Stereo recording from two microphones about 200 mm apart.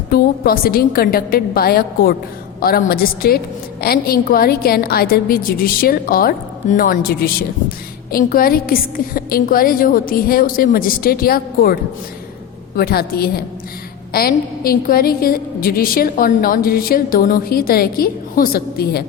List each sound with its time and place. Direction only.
0.1 s a woman's voice: 50° left (ahead or behind)